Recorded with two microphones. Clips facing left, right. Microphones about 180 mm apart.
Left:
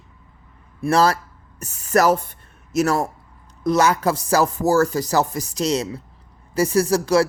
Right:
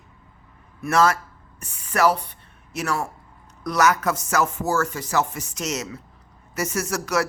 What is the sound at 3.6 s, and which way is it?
Speech, 30° left (ahead or behind).